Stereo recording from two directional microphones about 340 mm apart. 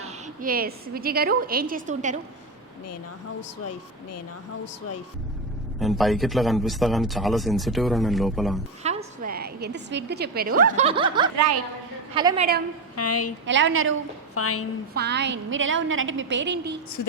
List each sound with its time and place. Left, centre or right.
0.0 s a woman's voice: right
3.6 s speech: left
5.8 s speech: centre
8.8 s a woman's voice: centre
13.0 s a woman's voice: left
13.4 s a woman's voice: right
14.3 s speech: left
14.9 s a woman's voice: right